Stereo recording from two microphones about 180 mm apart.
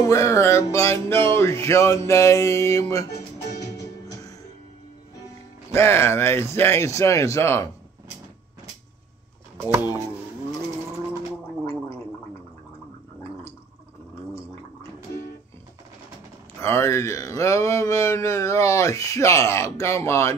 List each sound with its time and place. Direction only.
0.0 s speech: 15° left (ahead or behind)
3.5 s music: 20° left (ahead or behind)
5.7 s speech: 15° left (ahead or behind)
9.6 s a sound: 15° right (ahead or behind)
14.3 s gargling: 15° left (ahead or behind)
16.6 s speech: 15° left (ahead or behind)